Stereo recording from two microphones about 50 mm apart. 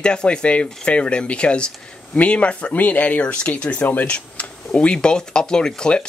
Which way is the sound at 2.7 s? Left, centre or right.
Left.